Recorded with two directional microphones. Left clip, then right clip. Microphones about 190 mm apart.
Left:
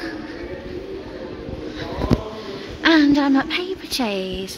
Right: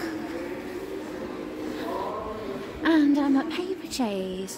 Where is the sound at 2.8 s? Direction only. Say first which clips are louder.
Left 7 dB; 10° left (ahead or behind).